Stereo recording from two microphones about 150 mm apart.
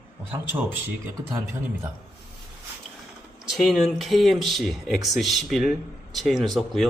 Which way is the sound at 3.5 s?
Centre (ahead or behind).